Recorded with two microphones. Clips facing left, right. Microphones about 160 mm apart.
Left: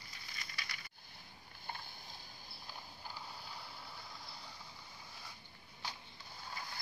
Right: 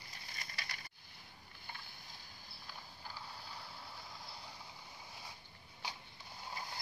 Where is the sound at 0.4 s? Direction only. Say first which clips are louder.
Right 1 dB; 40° right (ahead or behind).